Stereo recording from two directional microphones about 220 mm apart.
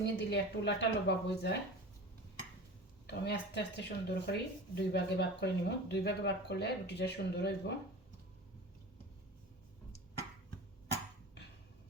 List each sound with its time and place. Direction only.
0.0 s speech: 50° left (ahead or behind)
3.1 s speech: 50° left (ahead or behind)
11.4 s a sound: 50° left (ahead or behind)